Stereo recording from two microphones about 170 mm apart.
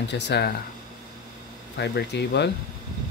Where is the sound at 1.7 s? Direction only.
85° left.